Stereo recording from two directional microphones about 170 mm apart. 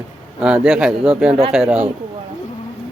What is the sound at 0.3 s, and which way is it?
A man's voice, 5° right (ahead or behind).